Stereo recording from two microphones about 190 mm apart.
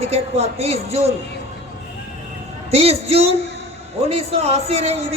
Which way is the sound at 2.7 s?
30° right (ahead or behind).